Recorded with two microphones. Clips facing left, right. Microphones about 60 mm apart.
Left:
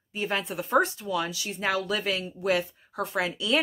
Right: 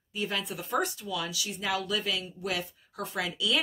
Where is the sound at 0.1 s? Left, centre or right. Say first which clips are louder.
Left 3 dB; left.